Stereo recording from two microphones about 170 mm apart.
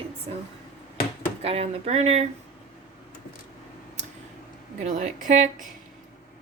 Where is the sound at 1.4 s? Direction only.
35° right (ahead or behind).